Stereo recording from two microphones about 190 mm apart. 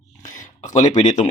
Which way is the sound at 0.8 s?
40° left (ahead or behind).